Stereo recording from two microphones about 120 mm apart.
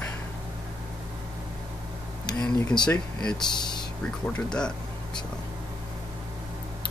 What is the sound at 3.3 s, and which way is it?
Speech, 40° left (ahead or behind).